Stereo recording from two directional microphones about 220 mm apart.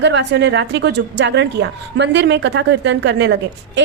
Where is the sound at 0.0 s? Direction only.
55° right (ahead or behind).